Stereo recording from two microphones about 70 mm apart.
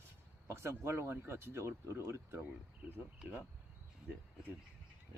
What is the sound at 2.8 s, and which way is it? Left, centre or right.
Speech, right.